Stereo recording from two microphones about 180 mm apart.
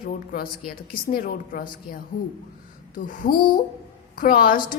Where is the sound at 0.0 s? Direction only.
50° left (ahead or behind).